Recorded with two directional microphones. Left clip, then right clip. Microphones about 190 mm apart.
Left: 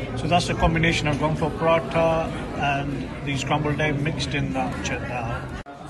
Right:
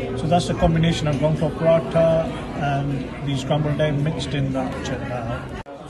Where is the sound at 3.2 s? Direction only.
15° right (ahead or behind).